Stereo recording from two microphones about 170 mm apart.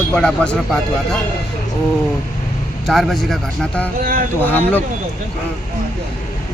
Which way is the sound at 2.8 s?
Centre (ahead or behind).